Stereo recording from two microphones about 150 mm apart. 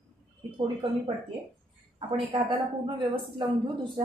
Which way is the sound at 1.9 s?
35° right (ahead or behind).